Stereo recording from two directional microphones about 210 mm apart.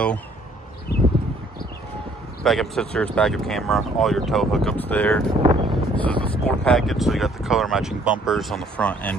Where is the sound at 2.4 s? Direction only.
Centre (ahead or behind).